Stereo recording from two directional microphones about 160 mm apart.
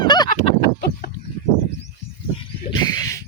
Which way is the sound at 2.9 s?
20° left (ahead or behind).